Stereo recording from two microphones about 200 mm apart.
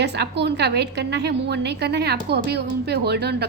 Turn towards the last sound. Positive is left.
turn(degrees=-55)  # may be behind; listen again after turning